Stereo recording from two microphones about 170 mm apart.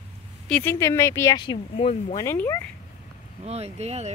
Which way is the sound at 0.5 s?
10° left (ahead or behind).